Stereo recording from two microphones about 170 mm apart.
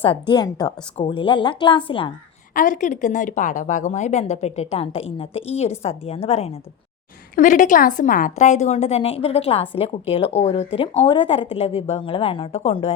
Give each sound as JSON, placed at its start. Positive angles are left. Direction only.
{"t": 0.0, "sound": "a woman's voice", "side_deg": 30}
{"t": 2.5, "sound": "a woman's voice", "side_deg": 50}